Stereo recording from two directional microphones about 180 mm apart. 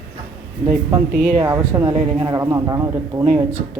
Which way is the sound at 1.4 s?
15° right (ahead or behind).